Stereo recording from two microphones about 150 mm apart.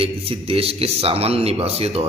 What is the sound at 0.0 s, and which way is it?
A man's voice, 40° right (ahead or behind).